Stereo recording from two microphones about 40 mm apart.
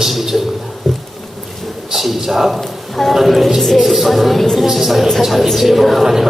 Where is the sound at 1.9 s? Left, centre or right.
Centre.